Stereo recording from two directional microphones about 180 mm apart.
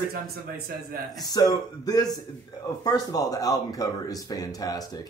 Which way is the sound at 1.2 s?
20° left (ahead or behind).